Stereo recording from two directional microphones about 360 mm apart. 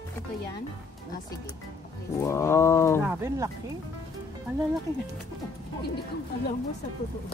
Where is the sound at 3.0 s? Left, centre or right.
Centre.